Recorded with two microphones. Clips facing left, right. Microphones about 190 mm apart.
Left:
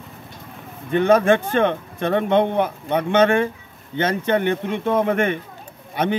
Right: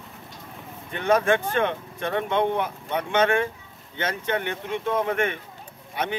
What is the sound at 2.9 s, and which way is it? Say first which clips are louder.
Speech: left 5 dB; 35° left (ahead or behind).